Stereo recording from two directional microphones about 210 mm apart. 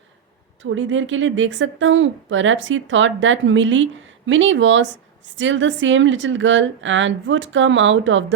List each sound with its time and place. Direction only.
0.6 s a woman's voice: 65° right (ahead or behind)